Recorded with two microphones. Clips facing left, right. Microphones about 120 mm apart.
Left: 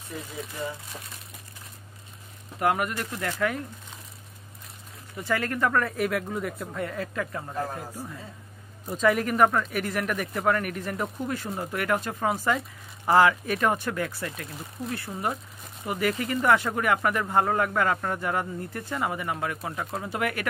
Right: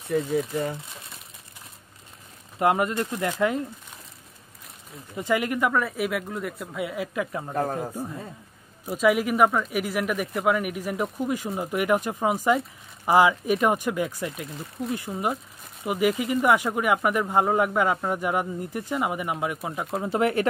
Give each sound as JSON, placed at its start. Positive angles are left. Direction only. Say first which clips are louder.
{"t": 0.1, "sound": "speech", "louder": "right 13 dB", "side_deg": -55}
{"t": 2.6, "sound": "speech", "louder": "right 3 dB", "side_deg": -20}
{"t": 5.1, "sound": "speech", "louder": "right 3 dB", "side_deg": -15}
{"t": 8.8, "sound": "speech", "louder": "right 2 dB", "side_deg": -5}
{"t": 19.9, "sound": "speech", "louder": "right 7 dB", "side_deg": -25}